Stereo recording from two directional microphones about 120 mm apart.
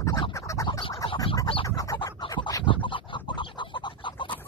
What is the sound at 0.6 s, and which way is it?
Scratch, 45° left (ahead or behind).